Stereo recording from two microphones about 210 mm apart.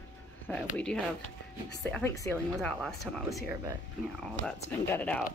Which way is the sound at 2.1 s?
15° left (ahead or behind).